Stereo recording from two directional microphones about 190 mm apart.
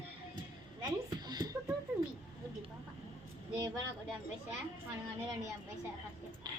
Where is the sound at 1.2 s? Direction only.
20° right (ahead or behind).